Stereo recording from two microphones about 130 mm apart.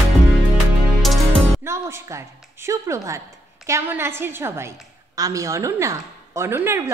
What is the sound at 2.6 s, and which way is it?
A woman's voice, 25° right (ahead or behind).